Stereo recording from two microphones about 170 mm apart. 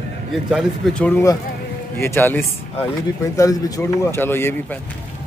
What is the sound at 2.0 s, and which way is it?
Speech, 10° left (ahead or behind).